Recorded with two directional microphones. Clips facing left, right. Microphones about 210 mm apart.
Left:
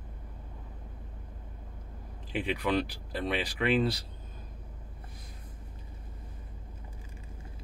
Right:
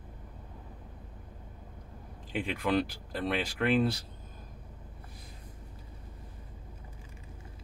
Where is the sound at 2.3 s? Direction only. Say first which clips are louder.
Even; centre (ahead or behind).